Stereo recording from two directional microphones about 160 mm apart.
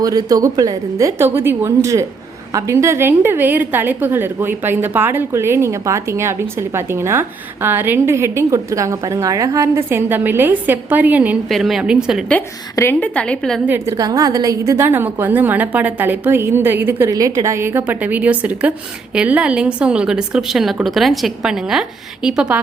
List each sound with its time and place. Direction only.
0.0 s a woman's voice: 20° right (ahead or behind); by 12.2 s 5° right (ahead or behind)
12.7 s a woman's voice: 15° left (ahead or behind)
13.7 s a woman's voice: 20° right (ahead or behind)